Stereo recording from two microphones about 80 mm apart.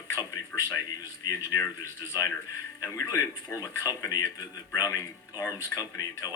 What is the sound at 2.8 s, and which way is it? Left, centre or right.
Speech, left.